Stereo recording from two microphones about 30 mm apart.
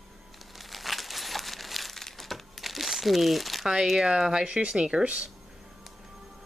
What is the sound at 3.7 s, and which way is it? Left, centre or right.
Speech, centre.